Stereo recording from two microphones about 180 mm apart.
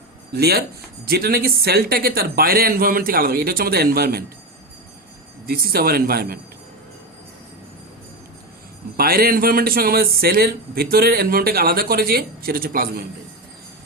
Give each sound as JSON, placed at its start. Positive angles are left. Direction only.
{"t": 0.3, "sound": "speech", "side_deg": -60}
{"t": 5.5, "sound": "speech", "side_deg": -55}
{"t": 9.0, "sound": "speech", "side_deg": -55}